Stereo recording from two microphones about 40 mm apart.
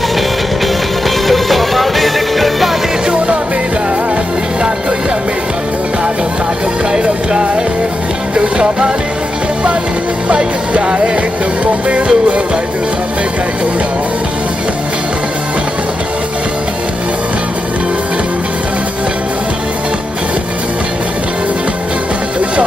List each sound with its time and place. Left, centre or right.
1.0 s music: centre
7.0 s music: right
10.2 s music: right
11.6 s music: right